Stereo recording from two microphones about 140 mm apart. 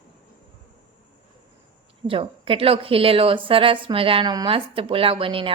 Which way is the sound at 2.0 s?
40° right (ahead or behind).